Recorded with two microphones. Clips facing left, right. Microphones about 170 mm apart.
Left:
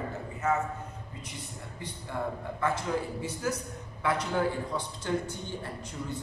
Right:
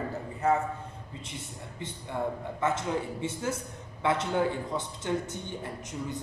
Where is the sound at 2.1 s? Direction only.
20° right (ahead or behind).